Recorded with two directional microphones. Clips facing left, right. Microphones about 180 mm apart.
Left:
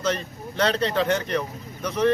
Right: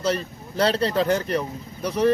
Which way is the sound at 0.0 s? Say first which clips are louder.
Right 2 dB; 35° right (ahead or behind).